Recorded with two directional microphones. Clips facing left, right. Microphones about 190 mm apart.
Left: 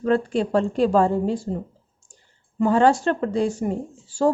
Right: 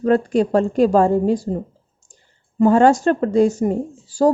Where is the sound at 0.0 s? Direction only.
40° right (ahead or behind).